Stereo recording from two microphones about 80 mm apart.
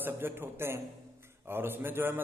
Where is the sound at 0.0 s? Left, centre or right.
Right.